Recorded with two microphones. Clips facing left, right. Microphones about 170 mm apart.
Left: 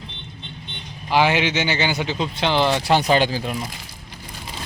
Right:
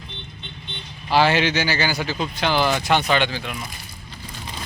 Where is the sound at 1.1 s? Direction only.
15° left (ahead or behind); by 3.6 s 35° left (ahead or behind).